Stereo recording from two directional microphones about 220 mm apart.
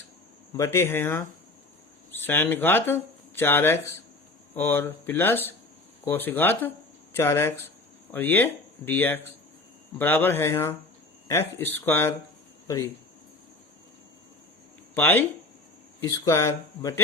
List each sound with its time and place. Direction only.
0.5 s speech: 15° left (ahead or behind)
2.2 s speech: 10° left (ahead or behind)
14.9 s speech: 10° left (ahead or behind)